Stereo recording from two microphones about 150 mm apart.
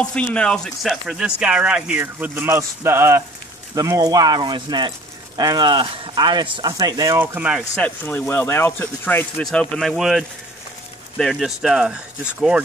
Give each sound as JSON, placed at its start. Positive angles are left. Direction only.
{"t": 0.0, "sound": "speech", "side_deg": 10}
{"t": 7.2, "sound": "speech", "side_deg": -10}
{"t": 7.7, "sound": "speech", "side_deg": 15}